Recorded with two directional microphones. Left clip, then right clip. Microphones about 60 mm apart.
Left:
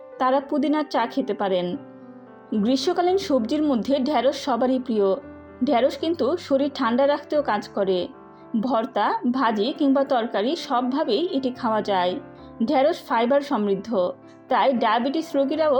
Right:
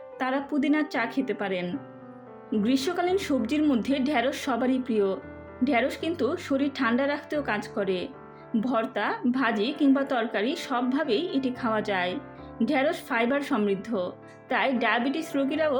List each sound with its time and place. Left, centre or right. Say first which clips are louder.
0.2 s a woman's voice: left 7 dB; left
2.6 s a woman's voice: left 5 dB; left
4.7 s a woman's voice: left 4 dB; left
8.6 s a woman's voice: left 5 dB; left
13.7 s a woman's voice: left 6 dB; left